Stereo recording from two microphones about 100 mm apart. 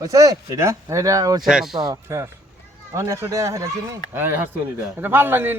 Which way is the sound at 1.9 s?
30° right (ahead or behind).